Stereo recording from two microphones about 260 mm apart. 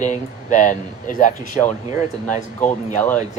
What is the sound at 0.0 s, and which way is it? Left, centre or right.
Speech, left.